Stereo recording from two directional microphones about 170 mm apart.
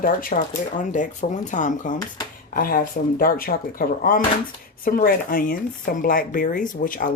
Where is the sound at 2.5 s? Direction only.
60° left (ahead or behind).